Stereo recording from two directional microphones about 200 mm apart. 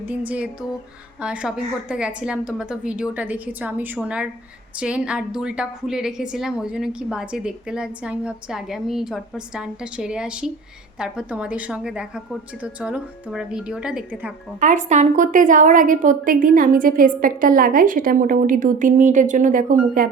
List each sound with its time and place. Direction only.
0.3 s a sound: 5° right (ahead or behind)
1.2 s a woman's voice: 5° right (ahead or behind)
14.6 s a woman's voice: 35° right (ahead or behind)